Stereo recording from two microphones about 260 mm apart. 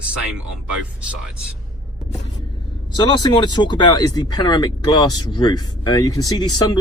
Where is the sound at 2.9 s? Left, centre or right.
Centre.